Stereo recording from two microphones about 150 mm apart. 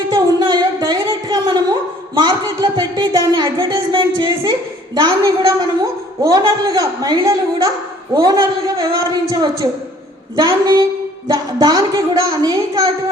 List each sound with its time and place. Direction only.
0.1 s a sound: 25° right (ahead or behind)
2.1 s a woman's voice: 25° right (ahead or behind)
4.9 s a woman's voice: 25° right (ahead or behind)